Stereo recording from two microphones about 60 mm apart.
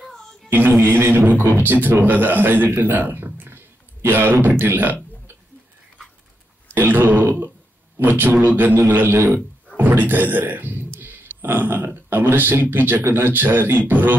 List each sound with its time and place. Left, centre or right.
0.1 s a sound: centre
0.5 s speech: right
6.7 s throat clearing: right
8.2 s speech: right